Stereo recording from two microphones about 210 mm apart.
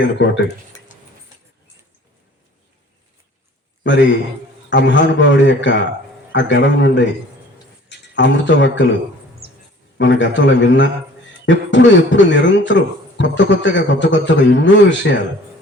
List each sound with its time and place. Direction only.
3.8 s speech: 60° left (ahead or behind)
10.0 s speech: 60° left (ahead or behind)